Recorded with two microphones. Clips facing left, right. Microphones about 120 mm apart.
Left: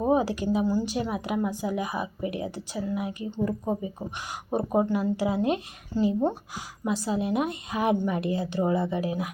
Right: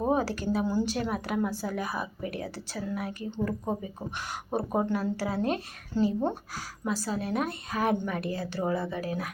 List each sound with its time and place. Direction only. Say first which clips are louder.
0.1 s a woman's voice: left 5 dB; 15° left (ahead or behind)